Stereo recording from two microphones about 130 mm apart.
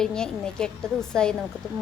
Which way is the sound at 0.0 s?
5° left (ahead or behind).